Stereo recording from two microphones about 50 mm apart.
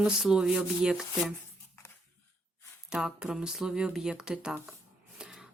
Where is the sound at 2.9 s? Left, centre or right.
Centre.